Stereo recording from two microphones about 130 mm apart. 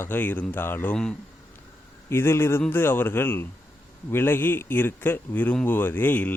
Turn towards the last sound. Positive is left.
turn(degrees=15)  # may be behind; listen again after turning